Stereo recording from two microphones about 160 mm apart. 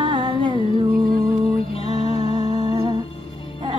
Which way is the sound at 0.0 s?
30° right (ahead or behind).